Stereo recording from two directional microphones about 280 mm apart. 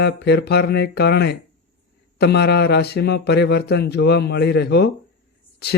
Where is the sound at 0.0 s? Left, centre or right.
Left.